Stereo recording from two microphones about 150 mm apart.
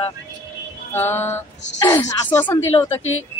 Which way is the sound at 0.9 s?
15° left (ahead or behind).